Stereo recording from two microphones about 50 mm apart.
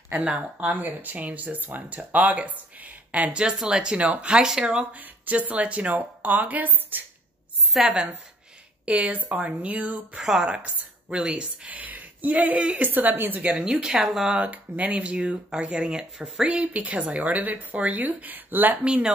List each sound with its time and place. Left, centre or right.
0.1 s speech: right
4.9 s speech: right
7.8 s speech: right
10.1 s speech: centre
11.7 s speech: right
12.8 s speech: right
13.4 s speech: right
13.7 s speech: centre
14.4 s speech: right